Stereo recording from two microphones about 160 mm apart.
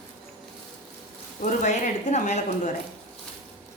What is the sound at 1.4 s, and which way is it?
Speech, 50° left (ahead or behind).